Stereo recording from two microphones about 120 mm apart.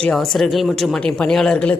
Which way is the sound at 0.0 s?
5° left (ahead or behind).